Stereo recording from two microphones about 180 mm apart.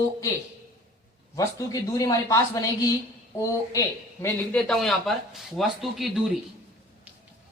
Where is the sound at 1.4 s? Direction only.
20° left (ahead or behind).